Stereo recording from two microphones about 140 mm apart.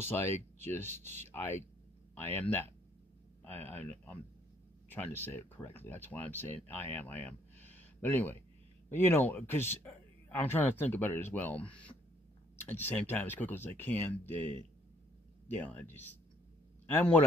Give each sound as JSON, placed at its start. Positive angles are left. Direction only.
{"t": 0.1, "sound": "speech", "side_deg": 15}
{"t": 3.5, "sound": "speech", "side_deg": 15}
{"t": 15.4, "sound": "a man's voice", "side_deg": 10}